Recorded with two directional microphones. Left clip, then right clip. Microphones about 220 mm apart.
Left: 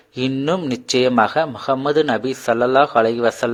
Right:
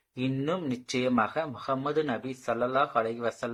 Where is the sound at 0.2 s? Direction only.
40° left (ahead or behind).